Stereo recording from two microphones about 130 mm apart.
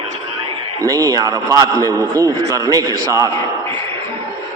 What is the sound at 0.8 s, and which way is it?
A man's voice, 25° right (ahead or behind).